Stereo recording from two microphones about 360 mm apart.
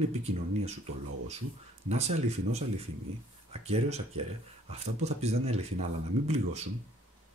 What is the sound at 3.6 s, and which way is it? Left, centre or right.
Speech, centre.